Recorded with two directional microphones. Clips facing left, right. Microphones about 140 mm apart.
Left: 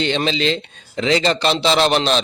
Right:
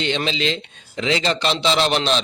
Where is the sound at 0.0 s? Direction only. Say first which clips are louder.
Left 3 dB; 40° left (ahead or behind).